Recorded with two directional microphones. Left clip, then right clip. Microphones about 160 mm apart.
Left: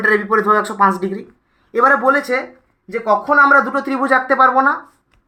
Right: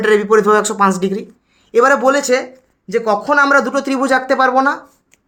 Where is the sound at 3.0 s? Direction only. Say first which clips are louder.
Left 1 dB; 90° right.